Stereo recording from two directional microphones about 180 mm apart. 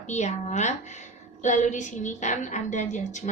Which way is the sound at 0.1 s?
40° left (ahead or behind).